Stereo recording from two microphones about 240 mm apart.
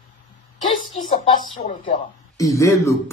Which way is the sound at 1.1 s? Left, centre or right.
Left.